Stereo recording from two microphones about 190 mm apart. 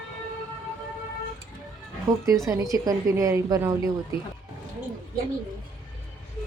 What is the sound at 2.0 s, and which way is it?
A woman's voice, 20° right (ahead or behind).